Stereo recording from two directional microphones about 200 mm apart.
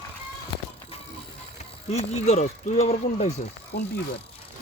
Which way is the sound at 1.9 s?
35° left (ahead or behind).